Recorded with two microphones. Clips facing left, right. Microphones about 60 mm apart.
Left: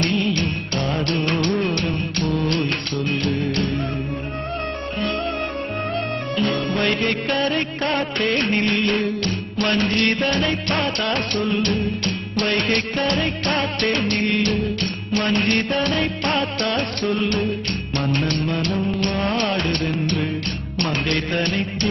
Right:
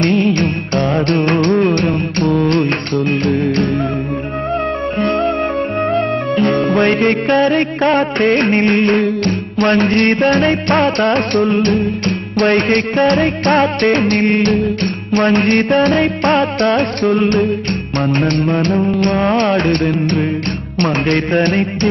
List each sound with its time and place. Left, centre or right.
0.0 s music: right
6.3 s music: right
16.7 s carnatic music: right
18.0 s music: right